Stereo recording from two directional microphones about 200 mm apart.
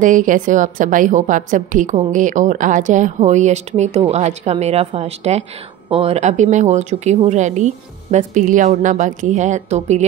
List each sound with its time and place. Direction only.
0.0 s a woman's voice: 40° right (ahead or behind)